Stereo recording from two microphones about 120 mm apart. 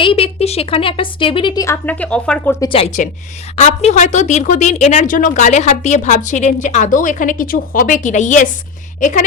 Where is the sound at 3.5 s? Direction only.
65° left (ahead or behind).